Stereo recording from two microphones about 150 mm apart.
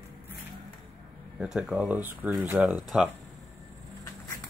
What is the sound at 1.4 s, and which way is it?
Speech, 5° right (ahead or behind).